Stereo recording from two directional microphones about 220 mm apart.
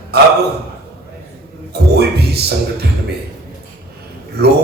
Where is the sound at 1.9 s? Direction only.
45° right (ahead or behind).